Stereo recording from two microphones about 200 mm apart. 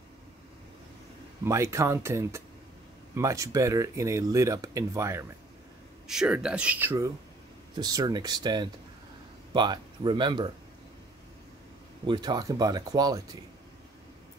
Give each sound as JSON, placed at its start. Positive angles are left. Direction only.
{"t": 1.4, "sound": "speech", "side_deg": -15}
{"t": 6.0, "sound": "speech", "side_deg": -5}
{"t": 12.1, "sound": "speech", "side_deg": -20}